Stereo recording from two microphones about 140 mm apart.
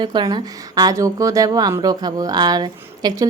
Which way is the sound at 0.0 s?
30° right (ahead or behind).